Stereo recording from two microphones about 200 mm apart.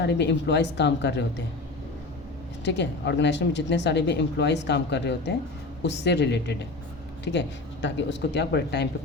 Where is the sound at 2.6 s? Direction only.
60° left (ahead or behind).